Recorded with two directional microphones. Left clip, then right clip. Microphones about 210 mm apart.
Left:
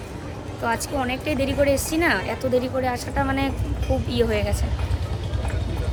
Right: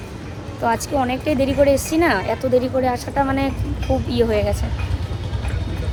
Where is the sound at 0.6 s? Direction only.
5° left (ahead or behind).